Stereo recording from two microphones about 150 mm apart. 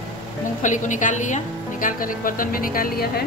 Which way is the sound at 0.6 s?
55° left (ahead or behind).